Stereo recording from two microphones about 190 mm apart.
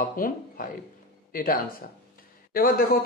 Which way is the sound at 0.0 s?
45° left (ahead or behind).